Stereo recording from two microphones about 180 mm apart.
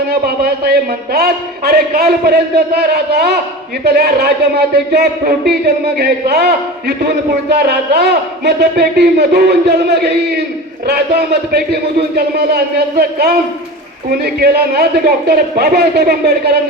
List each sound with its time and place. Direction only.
0.1 s speech: 60° right (ahead or behind)